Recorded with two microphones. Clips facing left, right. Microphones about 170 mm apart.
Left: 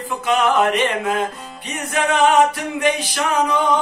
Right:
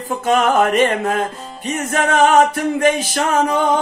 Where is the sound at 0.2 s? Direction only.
45° right (ahead or behind).